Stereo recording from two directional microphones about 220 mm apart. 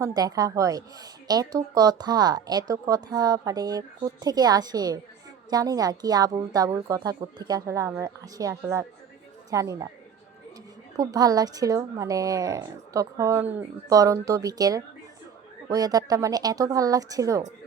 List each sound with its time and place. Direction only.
0.0 s a woman's voice: 15° right (ahead or behind)
10.9 s a woman's voice: 15° right (ahead or behind)